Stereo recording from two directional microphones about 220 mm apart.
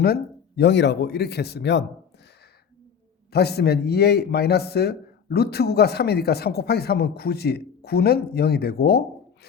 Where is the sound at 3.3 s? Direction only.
45° left (ahead or behind).